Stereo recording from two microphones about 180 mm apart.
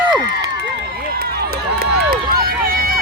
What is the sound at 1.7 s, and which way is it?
Run, 55° right (ahead or behind).